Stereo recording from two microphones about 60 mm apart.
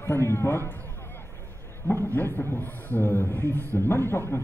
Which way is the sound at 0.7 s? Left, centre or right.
Left.